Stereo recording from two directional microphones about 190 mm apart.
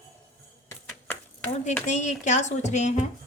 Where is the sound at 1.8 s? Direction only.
40° left (ahead or behind).